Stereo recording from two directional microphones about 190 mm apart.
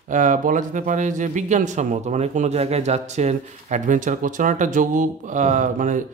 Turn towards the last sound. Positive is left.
turn(degrees=-40)  # may be behind; listen again after turning